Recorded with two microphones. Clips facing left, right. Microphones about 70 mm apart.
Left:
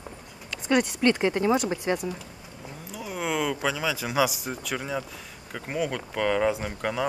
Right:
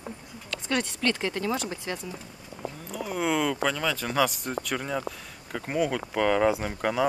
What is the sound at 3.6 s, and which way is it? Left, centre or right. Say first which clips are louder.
Speech: even; centre.